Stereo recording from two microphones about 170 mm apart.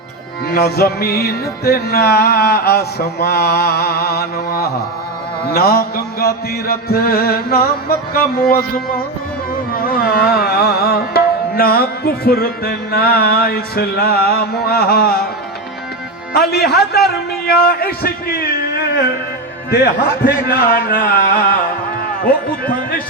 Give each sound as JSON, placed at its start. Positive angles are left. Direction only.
{"t": 0.5, "sound": "music", "side_deg": 65}
{"t": 9.7, "sound": "carnatic music", "side_deg": 60}
{"t": 10.3, "sound": "music", "side_deg": 65}
{"t": 16.3, "sound": "music", "side_deg": 70}